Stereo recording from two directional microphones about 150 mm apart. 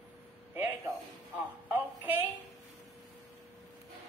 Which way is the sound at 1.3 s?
10° right (ahead or behind).